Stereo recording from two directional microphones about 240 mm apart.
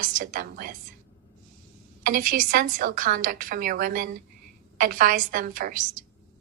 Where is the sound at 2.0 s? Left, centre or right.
Right.